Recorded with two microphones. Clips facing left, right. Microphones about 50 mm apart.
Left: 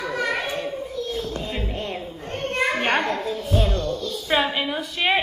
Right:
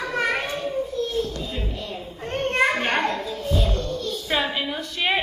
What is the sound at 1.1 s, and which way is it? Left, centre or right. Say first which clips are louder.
Music: right 1 dB; left.